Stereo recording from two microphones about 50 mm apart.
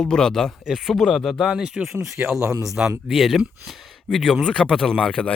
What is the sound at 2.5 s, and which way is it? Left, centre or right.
Speech, right.